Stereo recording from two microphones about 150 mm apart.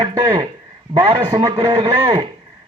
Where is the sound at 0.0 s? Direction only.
25° right (ahead or behind).